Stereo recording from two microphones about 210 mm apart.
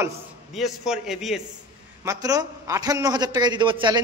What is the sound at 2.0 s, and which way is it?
A man's voice, 15° right (ahead or behind).